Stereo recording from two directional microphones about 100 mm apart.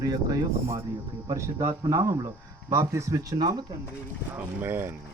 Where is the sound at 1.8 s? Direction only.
35° right (ahead or behind).